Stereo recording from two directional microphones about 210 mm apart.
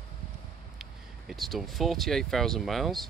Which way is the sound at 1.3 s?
Centre (ahead or behind).